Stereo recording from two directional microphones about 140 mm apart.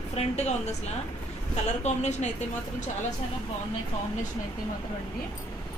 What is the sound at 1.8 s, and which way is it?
Speech, 55° left (ahead or behind).